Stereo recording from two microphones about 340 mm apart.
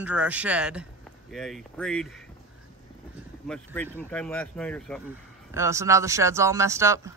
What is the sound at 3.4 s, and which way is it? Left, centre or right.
Speech, centre.